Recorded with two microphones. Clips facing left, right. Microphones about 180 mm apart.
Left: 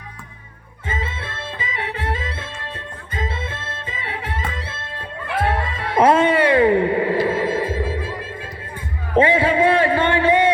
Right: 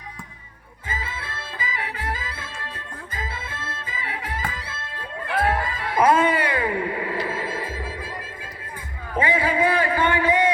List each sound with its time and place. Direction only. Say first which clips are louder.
0.9 s music: left 5 dB; 25° left (ahead or behind)
9.1 s music: left 6 dB; 30° left (ahead or behind)